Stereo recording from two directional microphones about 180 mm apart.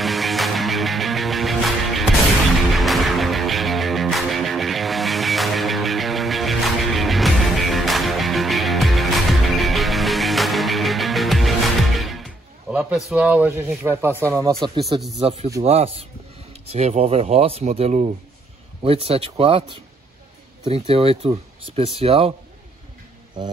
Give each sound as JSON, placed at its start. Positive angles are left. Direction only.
{"t": 0.0, "sound": "music", "side_deg": 0}
{"t": 13.1, "sound": "speech", "side_deg": -10}
{"t": 14.6, "sound": "speech", "side_deg": -25}